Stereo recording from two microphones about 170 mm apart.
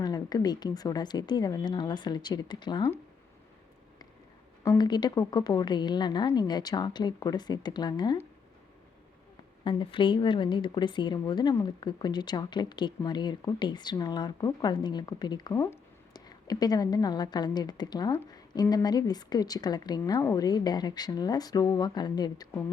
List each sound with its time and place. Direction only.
0.0 s speech: 25° left (ahead or behind)
4.6 s speech: 20° left (ahead or behind)
9.6 s speech: 30° left (ahead or behind)